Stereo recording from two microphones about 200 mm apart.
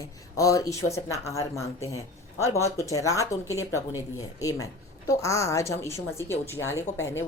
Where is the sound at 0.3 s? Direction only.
15° left (ahead or behind).